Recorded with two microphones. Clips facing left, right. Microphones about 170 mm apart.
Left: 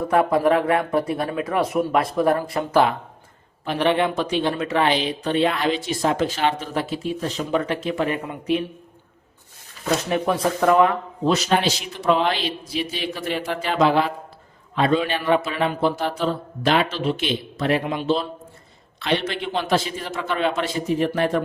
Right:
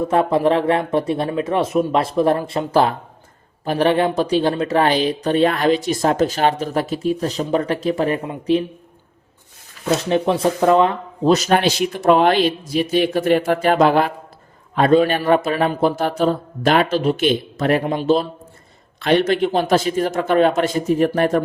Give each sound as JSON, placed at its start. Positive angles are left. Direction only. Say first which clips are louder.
{"t": 0.1, "sound": "speech", "louder": "even", "side_deg": -25}
{"t": 3.6, "sound": "speech", "louder": "right 4 dB", "side_deg": -40}
{"t": 10.1, "sound": "speech", "louder": "right 5 dB", "side_deg": -25}
{"t": 11.3, "sound": "speech", "louder": "right 5 dB", "side_deg": -45}